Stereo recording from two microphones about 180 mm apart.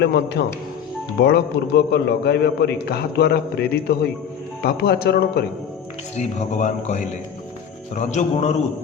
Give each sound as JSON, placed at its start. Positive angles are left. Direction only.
{"t": 0.0, "sound": "a man's voice", "side_deg": 70}
{"t": 6.1, "sound": "a man's voice", "side_deg": 40}